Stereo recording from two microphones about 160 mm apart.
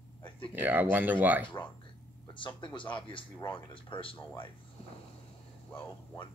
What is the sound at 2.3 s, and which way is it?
Speech, 30° left (ahead or behind).